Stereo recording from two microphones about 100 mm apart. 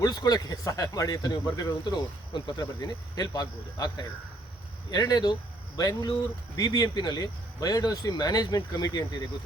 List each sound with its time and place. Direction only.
0.0 s speech: 40° left (ahead or behind)